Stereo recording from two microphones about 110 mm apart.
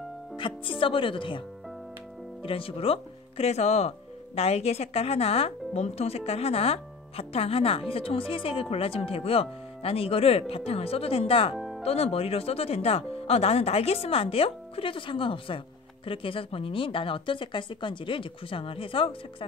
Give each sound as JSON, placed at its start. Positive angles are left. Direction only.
{"t": 0.4, "sound": "a woman's voice", "side_deg": 50}
{"t": 2.4, "sound": "speech", "side_deg": 55}
{"t": 11.5, "sound": "music", "side_deg": 0}
{"t": 11.8, "sound": "a woman's voice", "side_deg": 65}